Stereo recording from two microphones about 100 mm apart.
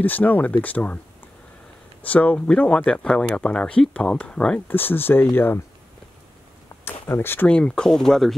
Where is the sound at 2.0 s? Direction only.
15° left (ahead or behind).